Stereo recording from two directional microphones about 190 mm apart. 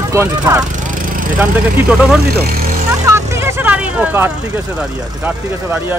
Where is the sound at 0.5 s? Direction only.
15° right (ahead or behind).